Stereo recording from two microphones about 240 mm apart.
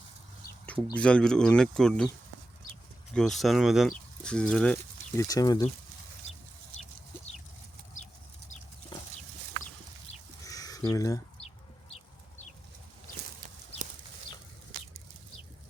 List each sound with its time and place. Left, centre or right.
0.9 s speech: centre
3.2 s speech: centre
10.4 s a sound: centre
11.9 s chicken: left